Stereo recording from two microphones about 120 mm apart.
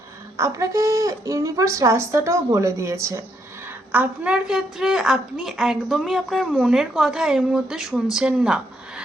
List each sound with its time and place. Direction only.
0.3 s speech: 25° right (ahead or behind)
3.9 s a woman's voice: 10° right (ahead or behind)